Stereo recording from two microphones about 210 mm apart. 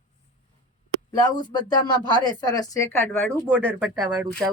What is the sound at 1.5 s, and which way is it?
Speech, 20° left (ahead or behind).